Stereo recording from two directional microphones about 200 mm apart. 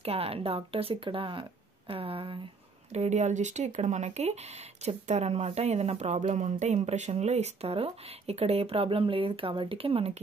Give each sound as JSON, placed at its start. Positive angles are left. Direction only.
{"t": 0.0, "sound": "speech", "side_deg": -30}